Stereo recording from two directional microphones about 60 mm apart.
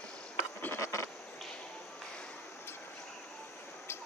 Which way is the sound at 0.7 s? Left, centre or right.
Left.